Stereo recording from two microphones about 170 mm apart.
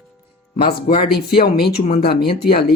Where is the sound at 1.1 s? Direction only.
65° left (ahead or behind).